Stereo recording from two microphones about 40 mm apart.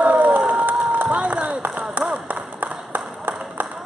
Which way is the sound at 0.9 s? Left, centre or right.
Right.